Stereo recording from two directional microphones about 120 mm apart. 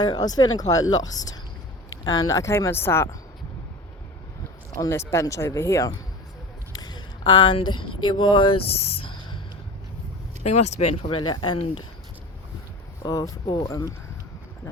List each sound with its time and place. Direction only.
0.0 s speech: 35° left (ahead or behind)
4.8 s speech: 25° left (ahead or behind)
6.7 s speech: 35° left (ahead or behind)
10.5 s speech: 70° left (ahead or behind)
11.2 s speech: 40° left (ahead or behind)
13.0 s speech: 30° left (ahead or behind)